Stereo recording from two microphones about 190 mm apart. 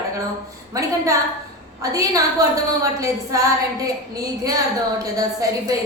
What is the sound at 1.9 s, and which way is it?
A woman's voice, 20° right (ahead or behind).